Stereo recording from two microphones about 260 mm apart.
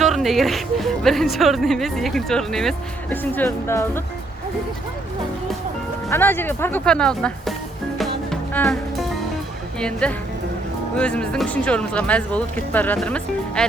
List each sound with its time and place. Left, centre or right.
0.0 s speech: centre
6.1 s speech: centre
7.9 s music: centre
9.8 s speech: centre